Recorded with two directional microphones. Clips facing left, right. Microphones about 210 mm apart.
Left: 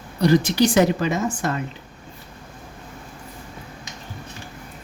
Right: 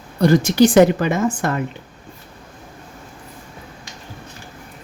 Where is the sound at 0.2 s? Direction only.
50° right (ahead or behind).